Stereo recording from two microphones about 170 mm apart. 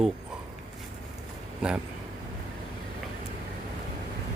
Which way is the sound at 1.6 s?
5° right (ahead or behind).